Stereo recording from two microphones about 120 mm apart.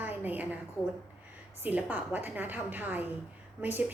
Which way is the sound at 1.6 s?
15° right (ahead or behind).